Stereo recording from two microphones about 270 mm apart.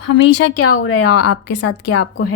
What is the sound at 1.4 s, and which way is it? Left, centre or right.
Speech, left.